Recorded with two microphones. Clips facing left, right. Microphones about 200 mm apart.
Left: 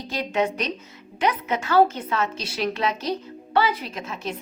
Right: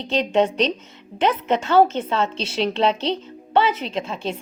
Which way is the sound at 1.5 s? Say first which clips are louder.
Right 2 dB; 25° right (ahead or behind).